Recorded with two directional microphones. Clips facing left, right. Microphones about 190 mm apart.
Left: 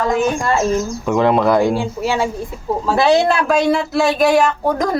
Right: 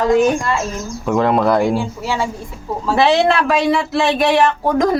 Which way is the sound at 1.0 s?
Centre (ahead or behind).